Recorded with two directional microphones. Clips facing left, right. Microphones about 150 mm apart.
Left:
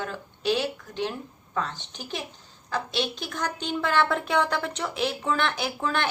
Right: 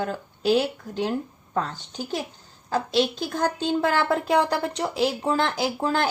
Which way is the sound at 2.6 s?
40° right (ahead or behind).